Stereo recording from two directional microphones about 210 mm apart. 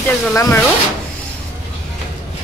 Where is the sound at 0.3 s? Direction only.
10° left (ahead or behind).